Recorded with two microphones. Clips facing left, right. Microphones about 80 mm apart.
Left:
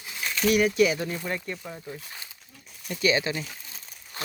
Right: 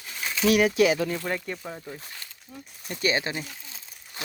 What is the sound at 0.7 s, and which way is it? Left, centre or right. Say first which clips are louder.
Speech: right 1 dB; right.